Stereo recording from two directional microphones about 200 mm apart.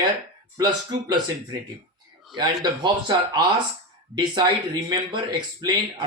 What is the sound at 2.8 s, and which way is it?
Speech, 20° right (ahead or behind).